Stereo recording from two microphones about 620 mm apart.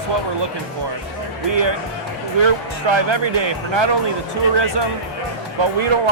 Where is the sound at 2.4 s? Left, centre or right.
Right.